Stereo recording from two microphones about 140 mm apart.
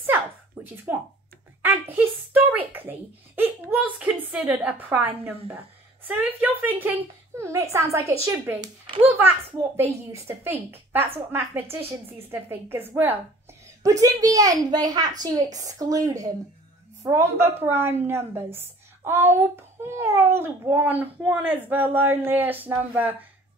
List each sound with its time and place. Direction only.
0.9 s a woman's voice: 15° right (ahead or behind)